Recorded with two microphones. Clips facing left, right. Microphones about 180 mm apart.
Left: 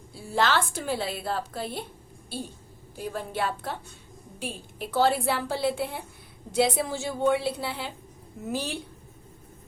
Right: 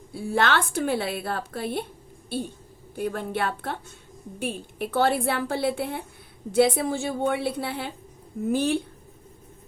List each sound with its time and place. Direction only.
0.1 s a woman's voice: 60° right (ahead or behind)
2.9 s a woman's voice: 55° right (ahead or behind)